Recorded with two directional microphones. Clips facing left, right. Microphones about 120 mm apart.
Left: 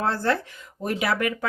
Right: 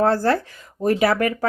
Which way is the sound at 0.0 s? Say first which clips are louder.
Right 6 dB; 40° right (ahead or behind).